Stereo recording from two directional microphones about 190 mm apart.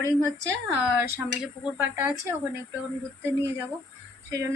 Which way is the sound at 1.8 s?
10° right (ahead or behind).